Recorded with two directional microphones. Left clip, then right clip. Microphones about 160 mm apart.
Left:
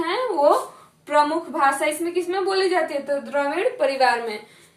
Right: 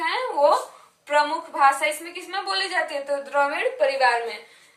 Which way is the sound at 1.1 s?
20° left (ahead or behind).